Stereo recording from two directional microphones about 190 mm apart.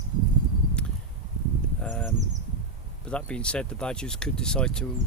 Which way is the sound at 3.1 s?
5° left (ahead or behind).